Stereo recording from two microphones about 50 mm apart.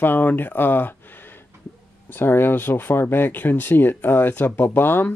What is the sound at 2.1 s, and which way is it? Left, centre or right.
Speech, left.